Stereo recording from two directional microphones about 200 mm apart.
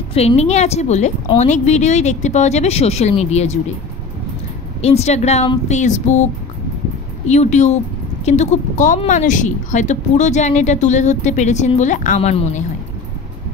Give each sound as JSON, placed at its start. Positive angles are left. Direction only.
{"t": 0.1, "sound": "a woman's voice", "side_deg": 30}
{"t": 4.8, "sound": "a woman's voice", "side_deg": 30}
{"t": 7.2, "sound": "a woman's voice", "side_deg": 35}